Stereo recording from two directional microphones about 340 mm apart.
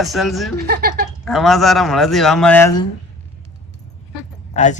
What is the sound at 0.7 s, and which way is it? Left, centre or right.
Speech, right.